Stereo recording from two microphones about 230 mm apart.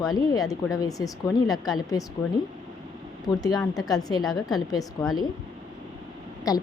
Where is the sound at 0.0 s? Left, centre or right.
Centre.